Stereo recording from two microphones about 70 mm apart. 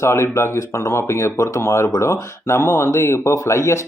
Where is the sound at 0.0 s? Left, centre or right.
Left.